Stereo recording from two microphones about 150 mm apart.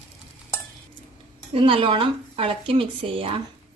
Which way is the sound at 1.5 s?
35° right (ahead or behind).